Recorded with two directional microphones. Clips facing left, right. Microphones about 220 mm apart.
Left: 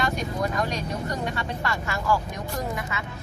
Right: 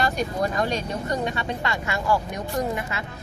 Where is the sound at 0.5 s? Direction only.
30° right (ahead or behind).